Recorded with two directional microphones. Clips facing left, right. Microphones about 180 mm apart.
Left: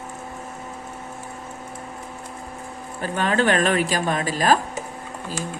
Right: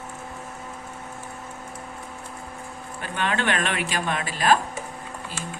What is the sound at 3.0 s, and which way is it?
A woman's voice, 40° left (ahead or behind).